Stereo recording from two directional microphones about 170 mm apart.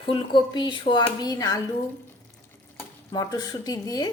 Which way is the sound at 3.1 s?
20° left (ahead or behind).